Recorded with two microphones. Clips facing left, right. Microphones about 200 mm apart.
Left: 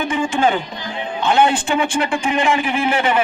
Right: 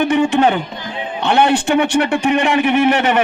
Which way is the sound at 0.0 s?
65° right (ahead or behind).